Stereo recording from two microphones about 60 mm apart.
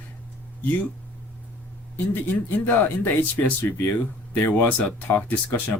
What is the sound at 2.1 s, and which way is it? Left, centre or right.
Speech, left.